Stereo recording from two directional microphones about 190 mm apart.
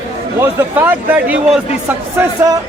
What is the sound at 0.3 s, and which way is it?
Speech, 10° right (ahead or behind).